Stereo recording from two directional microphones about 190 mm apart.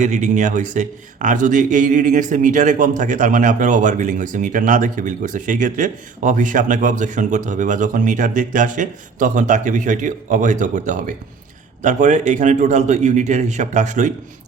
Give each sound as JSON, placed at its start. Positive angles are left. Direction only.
{"t": 0.0, "sound": "speech", "side_deg": -40}